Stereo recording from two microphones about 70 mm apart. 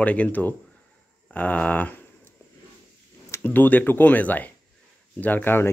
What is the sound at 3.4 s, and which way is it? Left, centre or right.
Speech, left.